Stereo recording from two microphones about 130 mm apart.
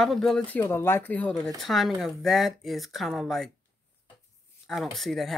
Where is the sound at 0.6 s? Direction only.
20° left (ahead or behind); by 3.5 s centre (ahead or behind).